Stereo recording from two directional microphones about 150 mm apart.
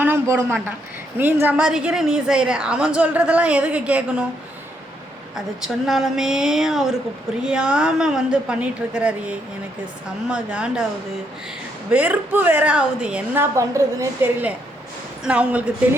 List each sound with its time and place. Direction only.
0.0 s a man's voice: 15° right (ahead or behind)
5.3 s a woman's voice: centre (ahead or behind)
11.9 s a woman's voice: 10° right (ahead or behind)
15.2 s a woman's voice: 10° right (ahead or behind)